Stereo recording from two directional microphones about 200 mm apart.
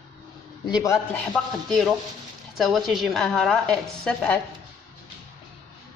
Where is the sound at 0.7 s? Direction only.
20° left (ahead or behind).